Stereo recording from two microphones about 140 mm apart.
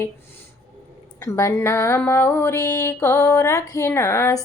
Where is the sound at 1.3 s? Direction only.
20° left (ahead or behind).